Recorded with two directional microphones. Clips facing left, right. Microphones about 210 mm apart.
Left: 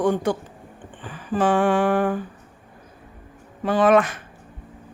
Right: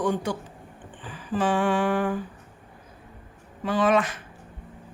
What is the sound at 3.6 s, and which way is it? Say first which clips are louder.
Speech: left 5 dB; 50° left (ahead or behind).